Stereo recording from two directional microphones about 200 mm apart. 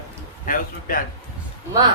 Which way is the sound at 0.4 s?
45° left (ahead or behind).